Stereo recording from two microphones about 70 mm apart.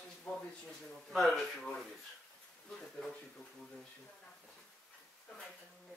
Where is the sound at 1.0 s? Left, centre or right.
Centre.